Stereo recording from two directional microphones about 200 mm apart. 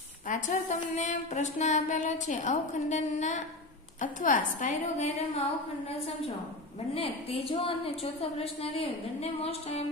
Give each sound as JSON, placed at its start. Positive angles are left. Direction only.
{"t": 0.3, "sound": "a woman's voice", "side_deg": 35}